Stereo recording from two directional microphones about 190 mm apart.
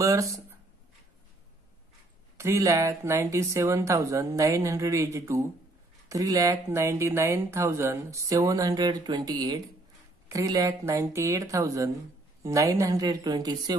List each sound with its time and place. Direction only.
0.0 s speech: 15° right (ahead or behind)
2.3 s a woman's voice: 15° right (ahead or behind)